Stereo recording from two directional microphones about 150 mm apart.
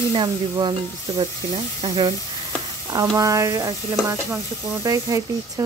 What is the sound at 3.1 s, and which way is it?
Speech, 20° right (ahead or behind).